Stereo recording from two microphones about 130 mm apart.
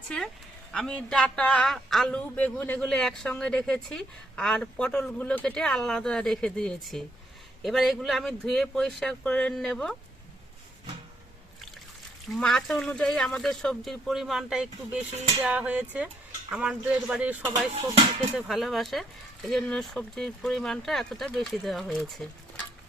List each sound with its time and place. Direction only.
0.7 s a man's voice: 5° left (ahead or behind)
12.3 s a man's voice: 5° left (ahead or behind); by 17.5 s 10° right (ahead or behind)
17.8 s music: 40° right (ahead or behind)
18.3 s a man's voice: centre (ahead or behind)